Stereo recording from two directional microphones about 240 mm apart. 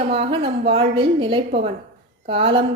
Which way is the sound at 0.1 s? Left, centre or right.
Right.